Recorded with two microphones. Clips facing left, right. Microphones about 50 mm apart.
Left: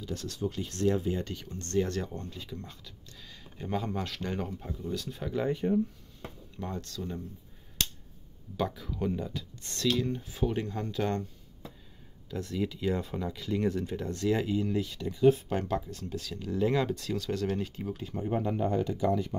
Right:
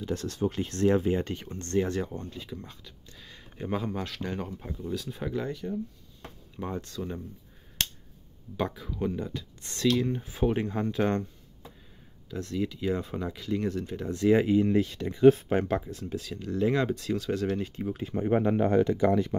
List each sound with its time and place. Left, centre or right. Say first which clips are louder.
0.0 s speech: right 5 dB; right
1.6 s speech: right 2 dB; centre
3.8 s speech: right 1 dB; centre
5.5 s speech: left 5 dB; left
6.5 s speech: right 4 dB; centre
8.6 s speech: right 1 dB; centre
9.9 s speech: right 3 dB; right
12.3 s speech: right 1 dB; centre
14.1 s speech: right 7 dB; right
15.4 s speech: right 5 dB; right
16.2 s speech: right 1 dB; centre
18.1 s speech: right 6 dB; right